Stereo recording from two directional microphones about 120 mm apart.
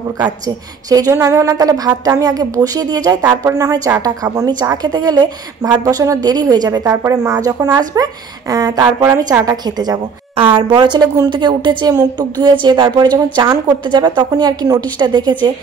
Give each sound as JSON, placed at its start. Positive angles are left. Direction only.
{"t": 0.8, "sound": "a woman's voice", "side_deg": -30}
{"t": 10.3, "sound": "a woman's voice", "side_deg": -45}